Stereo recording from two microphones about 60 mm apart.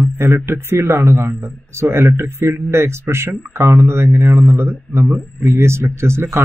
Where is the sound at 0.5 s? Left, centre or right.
Right.